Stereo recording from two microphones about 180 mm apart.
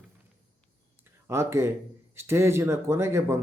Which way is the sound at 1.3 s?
15° right (ahead or behind).